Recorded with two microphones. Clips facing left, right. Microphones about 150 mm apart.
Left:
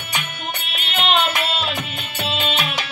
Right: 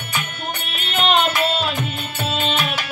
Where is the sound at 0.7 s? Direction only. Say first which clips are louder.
Right 2 dB; 40° right (ahead or behind).